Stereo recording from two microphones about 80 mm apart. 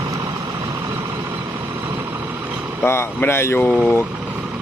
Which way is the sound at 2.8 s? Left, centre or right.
Left.